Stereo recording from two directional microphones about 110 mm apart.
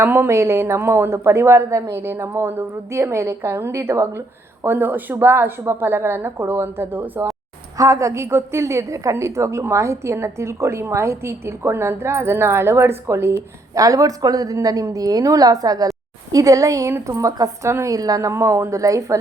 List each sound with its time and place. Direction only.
0.0 s a woman's voice: 20° right (ahead or behind)